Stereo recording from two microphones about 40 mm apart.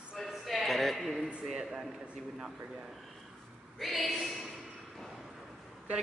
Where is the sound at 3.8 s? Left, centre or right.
Centre.